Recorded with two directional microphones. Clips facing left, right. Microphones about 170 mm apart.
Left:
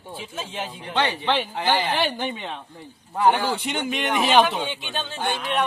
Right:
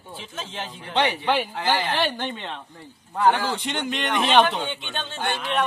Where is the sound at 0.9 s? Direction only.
15° right (ahead or behind).